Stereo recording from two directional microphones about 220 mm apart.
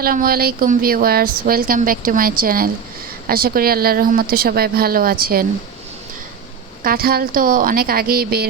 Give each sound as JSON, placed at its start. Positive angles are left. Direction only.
{"t": 0.0, "sound": "speech", "side_deg": -40}
{"t": 6.8, "sound": "speech", "side_deg": -40}